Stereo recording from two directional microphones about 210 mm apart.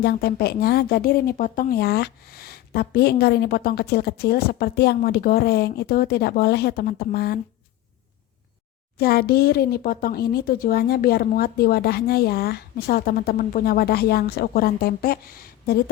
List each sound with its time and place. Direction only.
0.0 s speech: 50° left (ahead or behind)
9.0 s speech: 45° left (ahead or behind)